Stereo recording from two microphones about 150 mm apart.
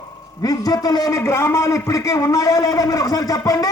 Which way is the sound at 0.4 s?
25° left (ahead or behind).